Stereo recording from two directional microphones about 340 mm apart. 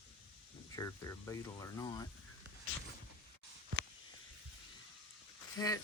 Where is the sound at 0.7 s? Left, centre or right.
Centre.